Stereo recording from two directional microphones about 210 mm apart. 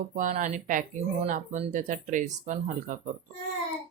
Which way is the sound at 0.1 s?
35° right (ahead or behind).